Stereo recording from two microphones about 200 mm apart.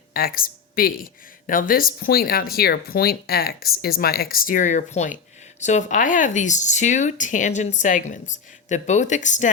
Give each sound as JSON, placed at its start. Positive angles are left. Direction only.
{"t": 0.1, "sound": "speech", "side_deg": 45}